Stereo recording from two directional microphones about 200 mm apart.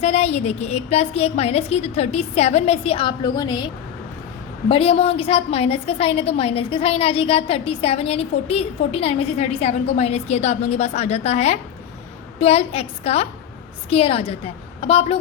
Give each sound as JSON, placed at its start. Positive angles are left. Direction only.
{"t": 0.0, "sound": "a woman's voice", "side_deg": 30}
{"t": 4.7, "sound": "a woman's voice", "side_deg": 30}